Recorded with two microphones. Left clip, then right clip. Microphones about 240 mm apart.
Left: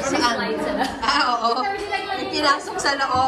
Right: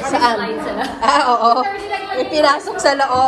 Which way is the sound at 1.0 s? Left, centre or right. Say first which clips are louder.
Right 8 dB; centre.